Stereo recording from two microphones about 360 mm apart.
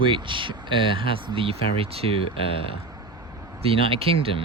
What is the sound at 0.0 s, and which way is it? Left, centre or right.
Speech, centre.